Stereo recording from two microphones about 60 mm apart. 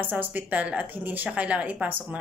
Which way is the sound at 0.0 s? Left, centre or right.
Right.